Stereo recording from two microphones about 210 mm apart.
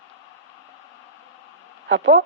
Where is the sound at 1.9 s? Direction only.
60° right (ahead or behind).